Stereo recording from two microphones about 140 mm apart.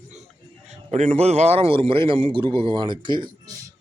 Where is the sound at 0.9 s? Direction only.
55° right (ahead or behind); by 3.2 s 35° right (ahead or behind).